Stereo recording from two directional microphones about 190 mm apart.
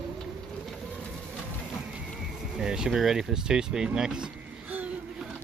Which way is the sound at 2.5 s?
5° right (ahead or behind).